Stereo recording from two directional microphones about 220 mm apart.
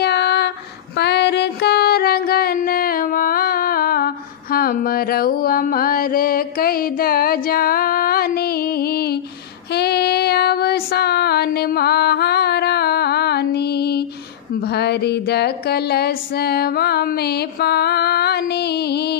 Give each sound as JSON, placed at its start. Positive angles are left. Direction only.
{"t": 0.0, "sound": "female singing", "side_deg": 50}
{"t": 0.9, "sound": "mantra", "side_deg": 50}
{"t": 9.7, "sound": "child singing", "side_deg": 45}
{"t": 14.6, "sound": "music", "side_deg": 45}